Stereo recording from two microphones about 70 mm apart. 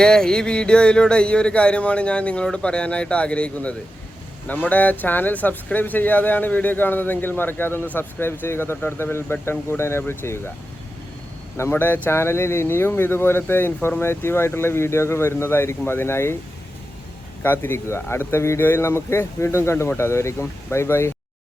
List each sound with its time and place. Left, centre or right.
0.0 s music: centre
4.4 s speech: left
11.5 s speech: left
17.4 s speech: left
18.6 s speech: left